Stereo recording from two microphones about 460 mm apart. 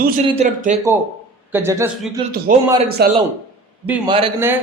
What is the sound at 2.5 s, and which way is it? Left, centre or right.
A man's voice, centre.